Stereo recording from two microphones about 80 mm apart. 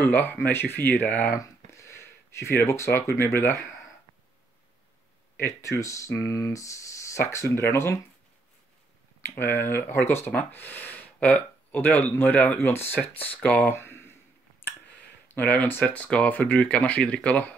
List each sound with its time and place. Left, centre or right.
0.0 s speech: left
1.3 s speech: left
5.4 s speech: left
9.2 s speech: left
13.7 s a sound: left
15.2 s speech: left